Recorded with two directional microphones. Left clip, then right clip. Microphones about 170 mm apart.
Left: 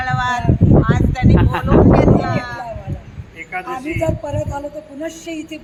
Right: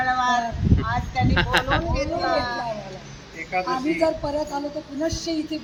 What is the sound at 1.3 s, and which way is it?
Speech, 45° left (ahead or behind).